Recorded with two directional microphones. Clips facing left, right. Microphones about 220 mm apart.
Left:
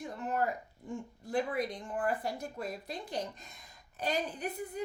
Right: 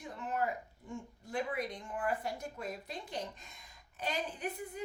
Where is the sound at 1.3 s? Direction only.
35° left (ahead or behind).